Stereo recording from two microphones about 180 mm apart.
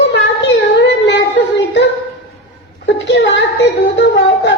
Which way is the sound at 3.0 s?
75° left (ahead or behind).